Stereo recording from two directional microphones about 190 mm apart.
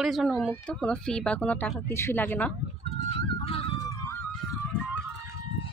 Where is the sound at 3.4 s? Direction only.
30° left (ahead or behind).